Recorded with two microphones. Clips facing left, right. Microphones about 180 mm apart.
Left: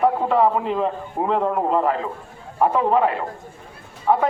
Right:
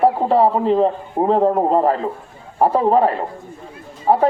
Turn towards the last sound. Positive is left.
turn(degrees=-35)  # may be behind; listen again after turning